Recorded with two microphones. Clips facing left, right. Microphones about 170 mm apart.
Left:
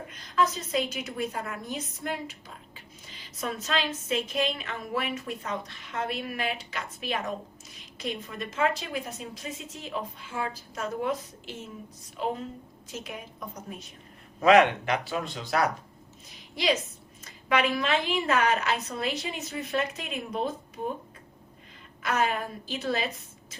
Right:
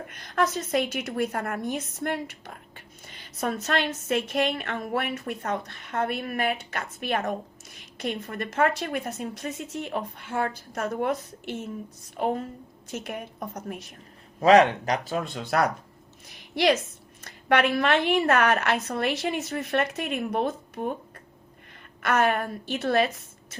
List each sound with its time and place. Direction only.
0.1 s a woman's voice: 60° right (ahead or behind)
14.4 s speech: 35° right (ahead or behind); by 15.6 s 55° right (ahead or behind)
17.2 s a woman's voice: 65° right (ahead or behind)
22.0 s a woman's voice: 65° right (ahead or behind)